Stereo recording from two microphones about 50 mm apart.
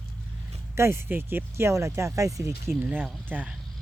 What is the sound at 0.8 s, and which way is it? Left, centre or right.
Speech, right.